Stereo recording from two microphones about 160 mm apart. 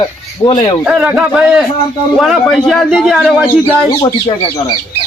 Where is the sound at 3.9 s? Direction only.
25° left (ahead or behind).